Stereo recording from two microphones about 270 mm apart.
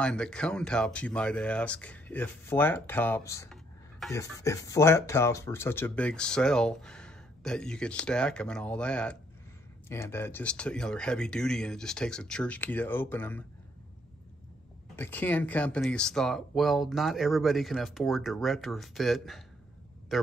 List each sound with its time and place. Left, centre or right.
0.0 s speech: centre
15.0 s speech: centre